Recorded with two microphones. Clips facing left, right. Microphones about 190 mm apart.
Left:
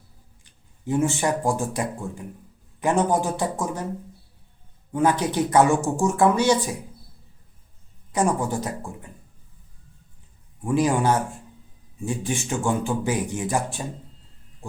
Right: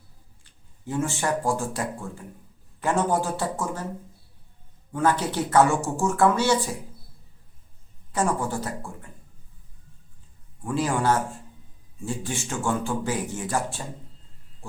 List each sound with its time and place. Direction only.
0.9 s speech: 15° left (ahead or behind)
4.9 s speech: 15° left (ahead or behind)
8.1 s speech: 15° left (ahead or behind)
10.6 s speech: 15° left (ahead or behind)